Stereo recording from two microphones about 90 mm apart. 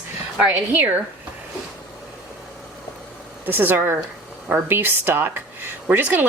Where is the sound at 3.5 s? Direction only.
25° right (ahead or behind).